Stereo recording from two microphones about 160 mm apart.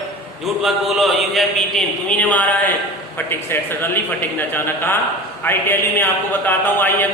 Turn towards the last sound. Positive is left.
turn(degrees=10)  # may be behind; listen again after turning